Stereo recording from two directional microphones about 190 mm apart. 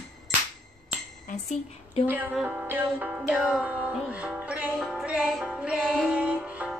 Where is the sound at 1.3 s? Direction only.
35° left (ahead or behind).